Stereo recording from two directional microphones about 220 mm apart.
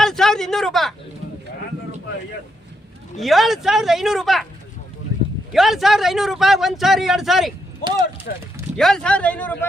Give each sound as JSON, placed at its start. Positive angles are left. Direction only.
{"t": 0.0, "sound": "a sound", "side_deg": 0}
{"t": 3.2, "sound": "speech", "side_deg": 0}
{"t": 5.5, "sound": "speech", "side_deg": 0}
{"t": 8.3, "sound": "speech", "side_deg": 45}
{"t": 8.7, "sound": "speech", "side_deg": 0}